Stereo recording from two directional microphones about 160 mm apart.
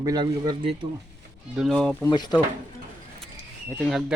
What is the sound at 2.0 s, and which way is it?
Speech, 25° left (ahead or behind).